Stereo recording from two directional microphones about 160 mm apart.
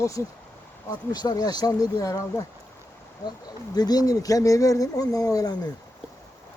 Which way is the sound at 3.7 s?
25° left (ahead or behind).